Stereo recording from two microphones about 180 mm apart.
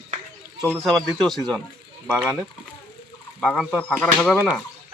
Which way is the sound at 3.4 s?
5° left (ahead or behind).